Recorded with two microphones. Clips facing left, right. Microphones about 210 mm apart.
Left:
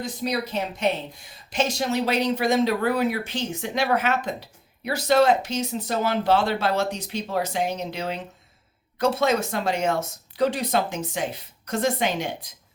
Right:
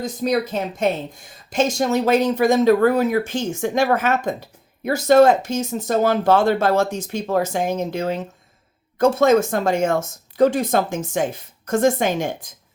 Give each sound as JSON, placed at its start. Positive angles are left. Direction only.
{"t": 0.0, "sound": "speech", "side_deg": -45}